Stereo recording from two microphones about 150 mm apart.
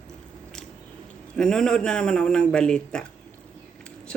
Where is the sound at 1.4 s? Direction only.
5° left (ahead or behind).